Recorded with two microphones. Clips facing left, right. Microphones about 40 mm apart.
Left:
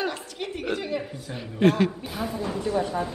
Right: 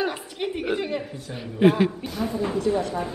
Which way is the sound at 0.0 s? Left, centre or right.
Centre.